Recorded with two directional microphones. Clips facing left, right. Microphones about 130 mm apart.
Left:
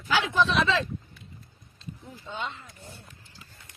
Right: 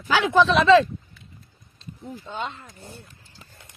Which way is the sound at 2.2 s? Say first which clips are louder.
Right 2 dB; 50° right (ahead or behind).